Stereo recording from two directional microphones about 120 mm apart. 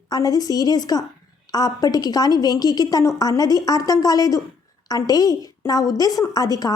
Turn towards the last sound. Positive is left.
turn(degrees=30)  # may be behind; listen again after turning